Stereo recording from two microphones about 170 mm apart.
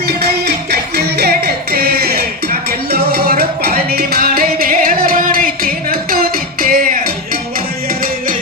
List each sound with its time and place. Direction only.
0.2 s music: 70° right (ahead or behind)